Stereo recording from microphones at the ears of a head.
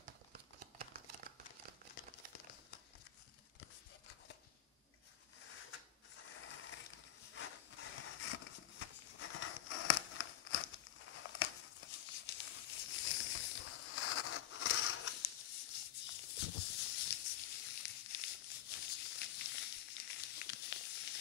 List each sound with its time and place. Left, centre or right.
0.0 s crumpling: right
5.4 s ratchet: left